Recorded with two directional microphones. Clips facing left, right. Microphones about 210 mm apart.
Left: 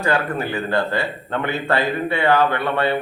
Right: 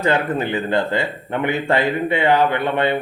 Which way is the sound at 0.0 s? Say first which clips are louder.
Right 2 dB; 20° right (ahead or behind).